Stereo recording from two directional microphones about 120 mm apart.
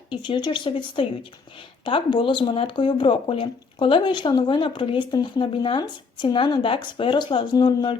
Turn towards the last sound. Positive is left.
turn(degrees=35)  # may be behind; listen again after turning